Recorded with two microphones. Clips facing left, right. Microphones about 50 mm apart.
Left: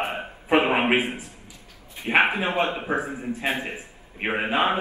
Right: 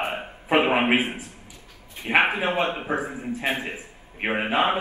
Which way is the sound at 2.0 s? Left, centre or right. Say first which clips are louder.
Even; right.